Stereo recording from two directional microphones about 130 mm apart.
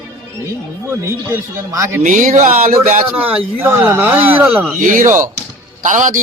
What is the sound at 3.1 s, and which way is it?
Speech, 10° right (ahead or behind).